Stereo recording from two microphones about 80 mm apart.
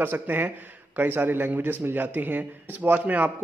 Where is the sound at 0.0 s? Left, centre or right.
Right.